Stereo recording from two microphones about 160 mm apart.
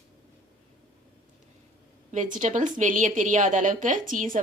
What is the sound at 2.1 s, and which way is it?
A woman's voice, 50° right (ahead or behind).